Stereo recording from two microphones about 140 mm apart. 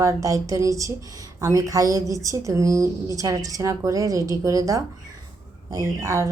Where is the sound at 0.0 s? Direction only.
25° right (ahead or behind).